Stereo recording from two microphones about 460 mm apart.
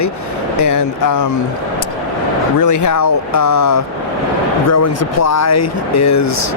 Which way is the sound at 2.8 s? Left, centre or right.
Left.